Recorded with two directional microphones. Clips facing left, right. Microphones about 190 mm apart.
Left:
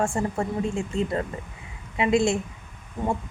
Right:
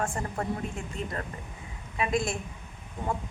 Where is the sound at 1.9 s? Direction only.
25° left (ahead or behind).